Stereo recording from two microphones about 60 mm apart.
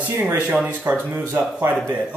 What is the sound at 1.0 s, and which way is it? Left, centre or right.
Speech, right.